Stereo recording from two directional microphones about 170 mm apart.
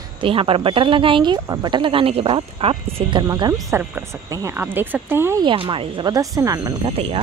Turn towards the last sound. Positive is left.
turn(degrees=-30)  # may be behind; listen again after turning